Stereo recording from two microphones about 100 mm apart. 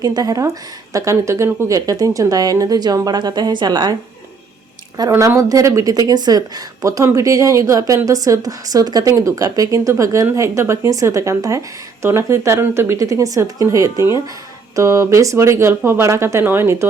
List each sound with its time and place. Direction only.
0.0 s a woman's voice: 40° right (ahead or behind)
5.1 s a woman's voice: 30° right (ahead or behind)